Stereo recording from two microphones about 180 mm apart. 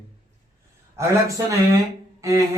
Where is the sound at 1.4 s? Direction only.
20° right (ahead or behind).